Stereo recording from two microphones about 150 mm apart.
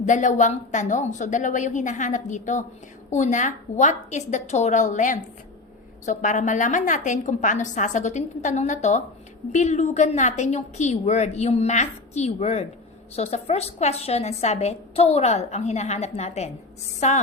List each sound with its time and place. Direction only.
0.0 s a woman's voice: 55° left (ahead or behind)